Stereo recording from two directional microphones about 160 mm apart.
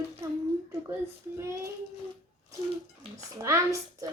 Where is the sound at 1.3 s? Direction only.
15° right (ahead or behind).